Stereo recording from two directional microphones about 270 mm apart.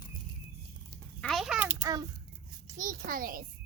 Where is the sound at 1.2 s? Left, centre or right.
Centre.